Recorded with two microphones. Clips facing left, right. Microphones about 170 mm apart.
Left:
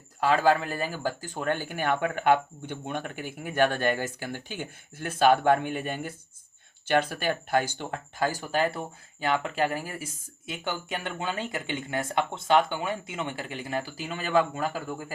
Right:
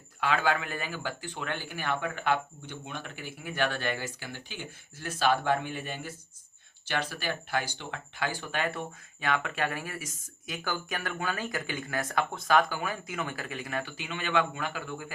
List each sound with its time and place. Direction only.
0.2 s speech: 40° left (ahead or behind)